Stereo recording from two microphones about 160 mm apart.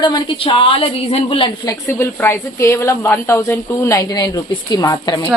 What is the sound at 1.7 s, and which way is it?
A woman's voice, 15° left (ahead or behind).